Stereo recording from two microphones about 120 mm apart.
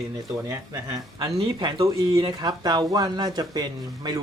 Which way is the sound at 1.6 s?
40° right (ahead or behind).